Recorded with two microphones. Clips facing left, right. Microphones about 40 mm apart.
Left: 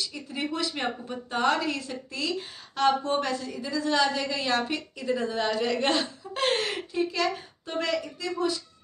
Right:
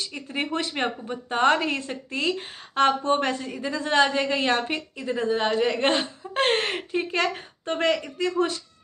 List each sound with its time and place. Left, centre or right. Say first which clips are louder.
0.1 s speech: right 3 dB; right